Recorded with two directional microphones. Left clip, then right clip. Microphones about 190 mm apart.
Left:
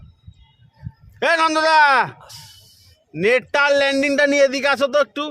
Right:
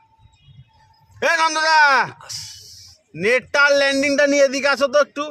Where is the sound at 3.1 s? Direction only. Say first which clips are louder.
Left 1 dB; 40° left (ahead or behind).